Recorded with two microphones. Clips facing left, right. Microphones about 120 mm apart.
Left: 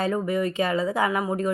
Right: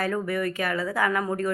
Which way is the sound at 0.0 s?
20° left (ahead or behind).